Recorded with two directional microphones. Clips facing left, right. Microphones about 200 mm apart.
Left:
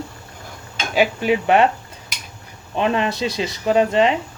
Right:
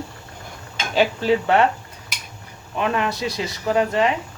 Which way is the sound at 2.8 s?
25° left (ahead or behind).